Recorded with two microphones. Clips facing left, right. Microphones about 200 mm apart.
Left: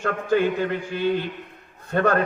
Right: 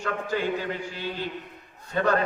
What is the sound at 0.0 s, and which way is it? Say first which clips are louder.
A man's voice: left 7 dB; 55° left (ahead or behind).